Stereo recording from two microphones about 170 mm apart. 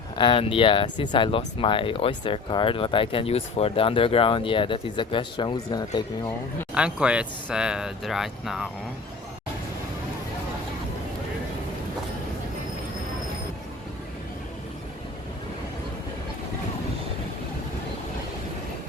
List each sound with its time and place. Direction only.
0.2 s speech: 30° left (ahead or behind)
6.7 s speech: 5° right (ahead or behind)